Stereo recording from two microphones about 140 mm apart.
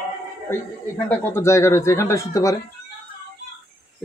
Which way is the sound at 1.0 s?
15° left (ahead or behind).